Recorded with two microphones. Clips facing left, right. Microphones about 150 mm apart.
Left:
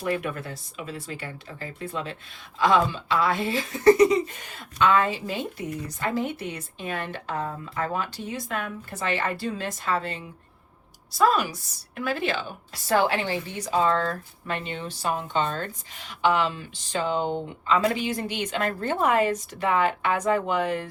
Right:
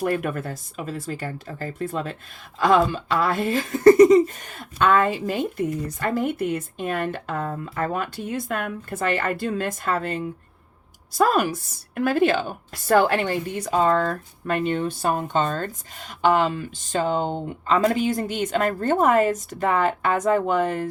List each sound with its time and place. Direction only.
0.0 s speech: 50° right (ahead or behind)